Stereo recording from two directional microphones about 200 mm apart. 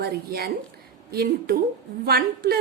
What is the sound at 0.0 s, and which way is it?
A woman's voice, 50° right (ahead or behind).